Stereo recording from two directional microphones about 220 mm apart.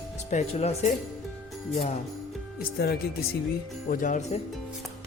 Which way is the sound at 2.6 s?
45° left (ahead or behind).